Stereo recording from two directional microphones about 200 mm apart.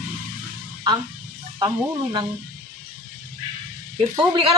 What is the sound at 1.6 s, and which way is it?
Speech, 20° right (ahead or behind).